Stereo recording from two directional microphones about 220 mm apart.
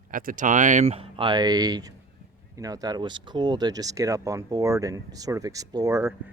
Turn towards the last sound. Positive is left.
turn(degrees=-15)  # may be behind; listen again after turning